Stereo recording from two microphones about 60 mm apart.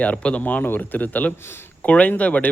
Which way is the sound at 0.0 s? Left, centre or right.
Left.